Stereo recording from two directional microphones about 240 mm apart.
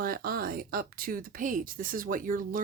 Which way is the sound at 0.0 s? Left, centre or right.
Right.